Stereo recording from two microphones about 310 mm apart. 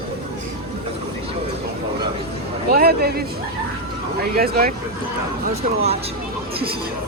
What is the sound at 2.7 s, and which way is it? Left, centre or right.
Speech, right.